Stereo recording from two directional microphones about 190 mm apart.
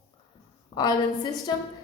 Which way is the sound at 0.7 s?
25° left (ahead or behind).